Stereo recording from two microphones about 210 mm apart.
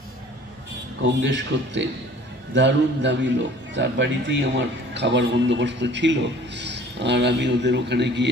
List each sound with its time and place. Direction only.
1.2 s a man's voice: 60° right (ahead or behind)